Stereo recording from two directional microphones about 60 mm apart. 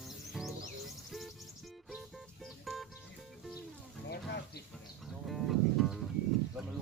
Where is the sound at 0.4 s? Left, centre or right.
Centre.